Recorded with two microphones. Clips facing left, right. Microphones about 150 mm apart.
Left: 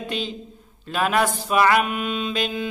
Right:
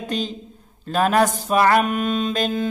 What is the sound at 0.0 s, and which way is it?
A man's voice, 40° right (ahead or behind).